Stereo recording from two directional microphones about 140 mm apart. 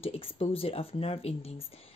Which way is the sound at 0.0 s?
45° left (ahead or behind).